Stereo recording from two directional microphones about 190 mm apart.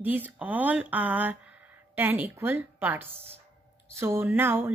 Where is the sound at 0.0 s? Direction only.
10° right (ahead or behind).